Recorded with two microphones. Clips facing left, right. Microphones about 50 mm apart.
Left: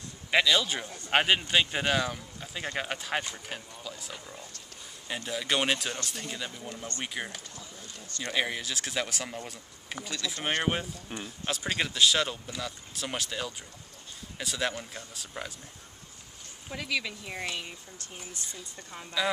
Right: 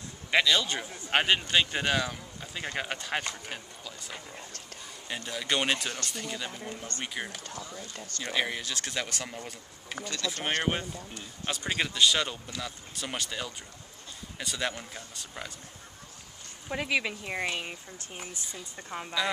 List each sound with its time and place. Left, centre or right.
0.3 s speech: centre
0.8 s speech: centre
1.1 s speech: centre
7.4 s speech: right
8.2 s speech: centre
16.7 s speech: right